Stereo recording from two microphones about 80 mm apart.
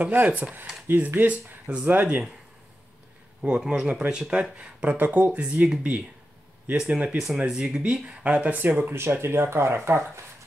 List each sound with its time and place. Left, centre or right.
0.0 s speech: right
3.4 s speech: centre
8.6 s speech: right